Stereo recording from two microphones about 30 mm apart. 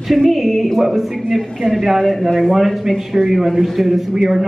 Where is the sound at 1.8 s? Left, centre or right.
Centre.